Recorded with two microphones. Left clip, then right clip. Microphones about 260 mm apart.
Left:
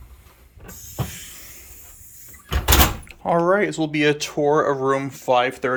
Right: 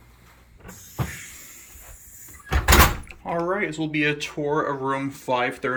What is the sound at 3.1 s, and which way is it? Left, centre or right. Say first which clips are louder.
Door: left 7 dB; left.